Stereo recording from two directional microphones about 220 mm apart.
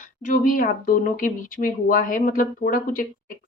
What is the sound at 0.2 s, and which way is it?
A woman's voice, 35° left (ahead or behind).